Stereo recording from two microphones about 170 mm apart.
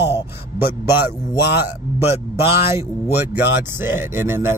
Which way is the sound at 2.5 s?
15° right (ahead or behind).